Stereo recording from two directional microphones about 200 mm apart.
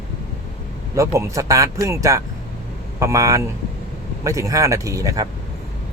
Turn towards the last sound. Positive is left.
turn(degrees=-15)  # may be behind; listen again after turning